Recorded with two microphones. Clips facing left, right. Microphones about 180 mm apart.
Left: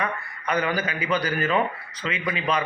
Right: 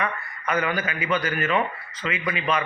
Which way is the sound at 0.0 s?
35° left (ahead or behind).